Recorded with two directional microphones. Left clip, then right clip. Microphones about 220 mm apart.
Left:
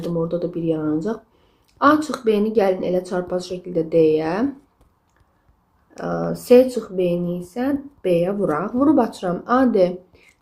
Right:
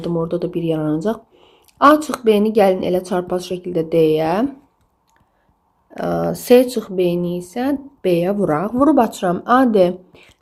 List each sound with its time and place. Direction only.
0.0 s speech: 35° right (ahead or behind)
5.9 s speech: 40° right (ahead or behind)